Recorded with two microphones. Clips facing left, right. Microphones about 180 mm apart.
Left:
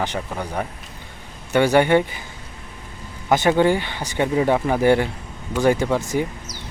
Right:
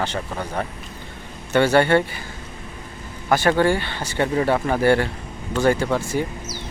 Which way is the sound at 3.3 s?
20° left (ahead or behind).